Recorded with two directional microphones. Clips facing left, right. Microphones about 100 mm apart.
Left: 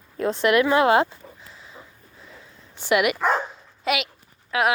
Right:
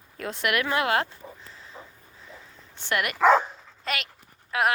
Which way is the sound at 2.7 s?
10° left (ahead or behind).